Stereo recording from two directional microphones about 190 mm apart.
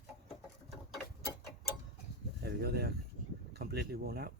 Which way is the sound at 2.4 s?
55° right (ahead or behind).